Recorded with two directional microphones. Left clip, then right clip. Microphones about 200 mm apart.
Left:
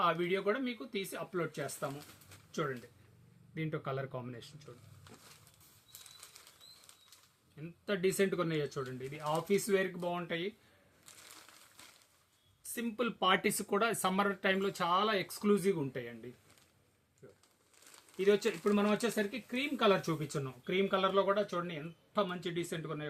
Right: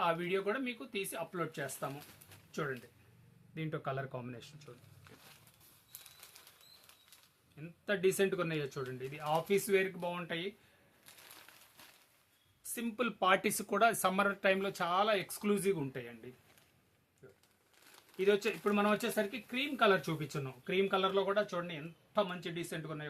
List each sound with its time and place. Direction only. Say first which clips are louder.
0.0 s speech: left 2 dB; 15° right (ahead or behind)
3.5 s speech: left 1 dB; 20° right (ahead or behind)
7.9 s speech: right 1 dB; 20° right (ahead or behind)
12.7 s speech: left 1 dB; 25° right (ahead or behind)
17.2 s crumpling: left 1 dB; 20° right (ahead or behind)
18.2 s speech: left 1 dB; 10° right (ahead or behind)